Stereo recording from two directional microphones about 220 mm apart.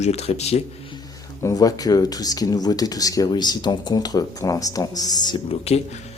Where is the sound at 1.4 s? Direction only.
15° left (ahead or behind).